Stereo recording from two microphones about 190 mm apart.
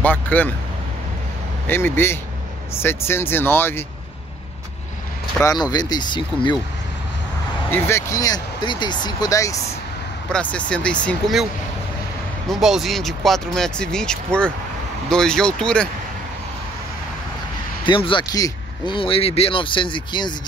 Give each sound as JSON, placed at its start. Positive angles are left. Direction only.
{"t": 0.0, "sound": "speech", "side_deg": 10}
{"t": 1.7, "sound": "speech", "side_deg": 10}
{"t": 5.4, "sound": "speech", "side_deg": 20}
{"t": 7.7, "sound": "speech", "side_deg": 15}
{"t": 10.3, "sound": "speech", "side_deg": 5}
{"t": 12.4, "sound": "speech", "side_deg": 0}
{"t": 17.8, "sound": "speech", "side_deg": 25}